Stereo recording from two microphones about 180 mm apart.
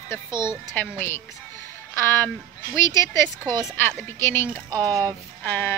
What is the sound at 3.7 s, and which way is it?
Speech, 10° left (ahead or behind).